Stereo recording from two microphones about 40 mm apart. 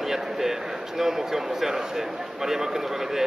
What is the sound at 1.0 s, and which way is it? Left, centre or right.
A man's voice, centre.